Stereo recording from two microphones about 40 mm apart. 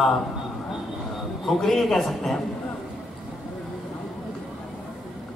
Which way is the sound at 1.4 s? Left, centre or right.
Centre.